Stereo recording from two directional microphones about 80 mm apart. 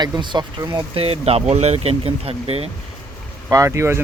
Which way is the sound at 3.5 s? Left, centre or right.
Right.